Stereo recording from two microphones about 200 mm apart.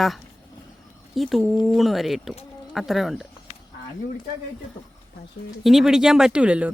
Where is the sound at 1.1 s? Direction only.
Centre (ahead or behind).